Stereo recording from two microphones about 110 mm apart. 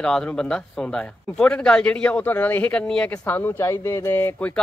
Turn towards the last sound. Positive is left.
turn(degrees=15)  # may be behind; listen again after turning